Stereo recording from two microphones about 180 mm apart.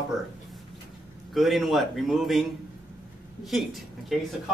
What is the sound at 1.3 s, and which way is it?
Speech, centre (ahead or behind).